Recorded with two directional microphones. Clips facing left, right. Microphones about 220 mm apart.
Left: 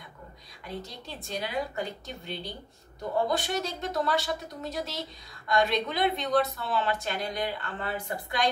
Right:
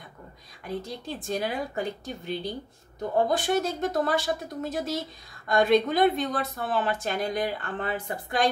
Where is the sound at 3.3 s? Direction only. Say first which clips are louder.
Right 5 dB; 50° right (ahead or behind).